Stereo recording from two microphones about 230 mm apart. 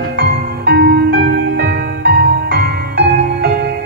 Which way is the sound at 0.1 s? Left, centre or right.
Right.